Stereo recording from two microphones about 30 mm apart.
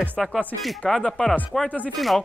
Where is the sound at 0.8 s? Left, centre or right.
Centre.